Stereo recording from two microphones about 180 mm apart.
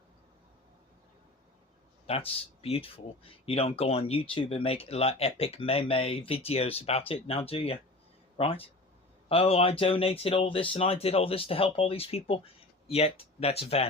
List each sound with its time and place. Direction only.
2.0 s speech: 35° left (ahead or behind)